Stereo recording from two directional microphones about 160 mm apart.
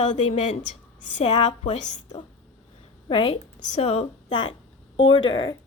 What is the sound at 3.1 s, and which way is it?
Speech, 30° left (ahead or behind).